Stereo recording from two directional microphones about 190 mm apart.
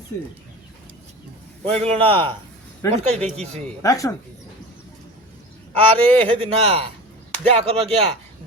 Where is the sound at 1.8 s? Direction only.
30° right (ahead or behind).